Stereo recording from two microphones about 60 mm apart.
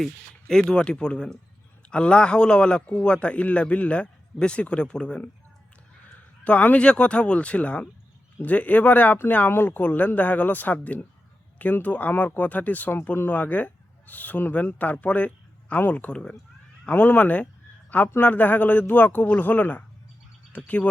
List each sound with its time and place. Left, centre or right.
0.0 s a man's voice: centre
6.4 s speech: left
16.9 s speech: left